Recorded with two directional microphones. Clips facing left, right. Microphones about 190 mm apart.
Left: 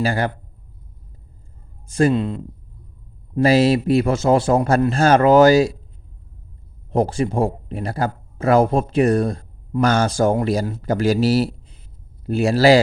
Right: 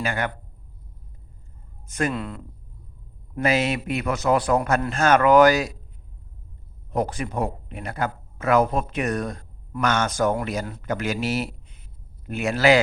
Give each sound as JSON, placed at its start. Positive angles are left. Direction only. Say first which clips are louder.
{"t": 0.0, "sound": "speech", "louder": "left 6 dB", "side_deg": 35}
{"t": 1.9, "sound": "a man's voice", "louder": "left 9 dB", "side_deg": 30}
{"t": 3.3, "sound": "a man's voice", "louder": "left 8 dB", "side_deg": 35}
{"t": 6.9, "sound": "speech", "louder": "left 6 dB", "side_deg": 30}